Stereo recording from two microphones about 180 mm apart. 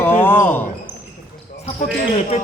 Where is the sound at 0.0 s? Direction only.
10° left (ahead or behind).